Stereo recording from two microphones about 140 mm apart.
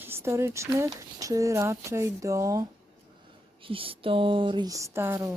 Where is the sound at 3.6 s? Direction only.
40° right (ahead or behind); by 5.3 s 20° right (ahead or behind).